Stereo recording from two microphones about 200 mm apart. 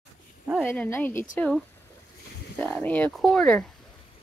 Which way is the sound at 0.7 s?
10° left (ahead or behind).